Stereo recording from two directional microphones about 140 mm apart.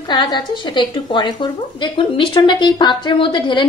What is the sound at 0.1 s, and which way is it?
Speech, 30° left (ahead or behind).